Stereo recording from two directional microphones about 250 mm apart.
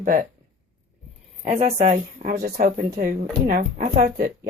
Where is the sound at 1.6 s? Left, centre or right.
Right.